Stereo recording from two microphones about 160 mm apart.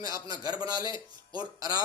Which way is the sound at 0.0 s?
25° right (ahead or behind).